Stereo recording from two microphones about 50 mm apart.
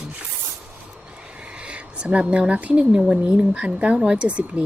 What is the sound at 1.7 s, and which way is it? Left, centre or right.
A woman's voice, right.